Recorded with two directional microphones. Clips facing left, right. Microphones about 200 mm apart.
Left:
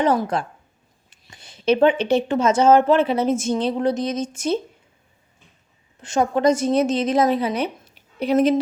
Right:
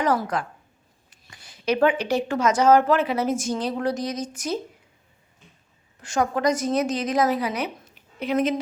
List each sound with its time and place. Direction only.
0.0 s speech: 25° left (ahead or behind)
6.0 s speech: 25° left (ahead or behind)